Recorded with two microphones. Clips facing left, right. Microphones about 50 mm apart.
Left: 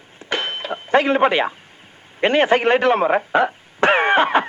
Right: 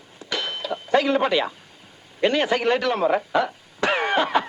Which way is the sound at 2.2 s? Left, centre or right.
Left.